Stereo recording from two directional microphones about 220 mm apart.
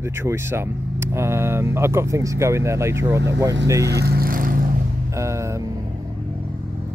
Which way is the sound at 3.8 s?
50° right (ahead or behind).